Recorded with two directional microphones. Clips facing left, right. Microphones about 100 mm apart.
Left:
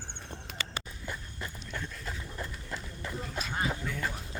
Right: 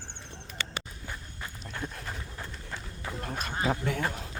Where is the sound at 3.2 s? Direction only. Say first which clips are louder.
Right 4 dB; 55° right (ahead or behind).